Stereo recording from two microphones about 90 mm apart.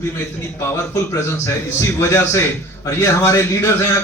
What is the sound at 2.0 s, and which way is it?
A man's voice, 30° left (ahead or behind).